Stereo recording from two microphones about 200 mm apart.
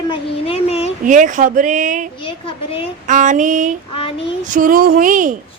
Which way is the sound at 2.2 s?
30° left (ahead or behind).